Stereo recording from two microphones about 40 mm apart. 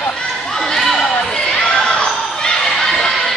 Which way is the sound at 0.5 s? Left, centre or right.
Centre.